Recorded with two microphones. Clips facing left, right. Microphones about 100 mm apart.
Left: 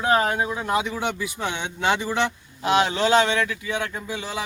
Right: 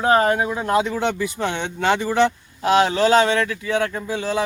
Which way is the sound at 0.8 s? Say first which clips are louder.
Right 5 dB; 45° right (ahead or behind).